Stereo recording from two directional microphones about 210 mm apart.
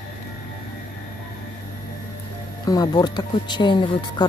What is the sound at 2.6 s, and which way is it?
Speech, 20° left (ahead or behind).